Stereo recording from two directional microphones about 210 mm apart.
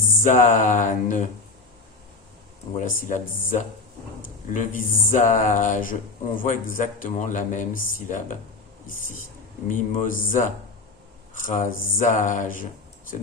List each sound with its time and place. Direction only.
0.2 s speech: 35° left (ahead or behind)
2.8 s speech: 40° left (ahead or behind)